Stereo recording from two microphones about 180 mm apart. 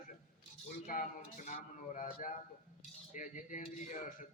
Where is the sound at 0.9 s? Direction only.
45° left (ahead or behind).